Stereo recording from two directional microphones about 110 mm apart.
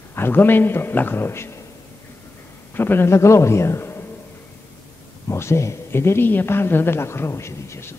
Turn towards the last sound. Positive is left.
turn(degrees=25)  # may be behind; listen again after turning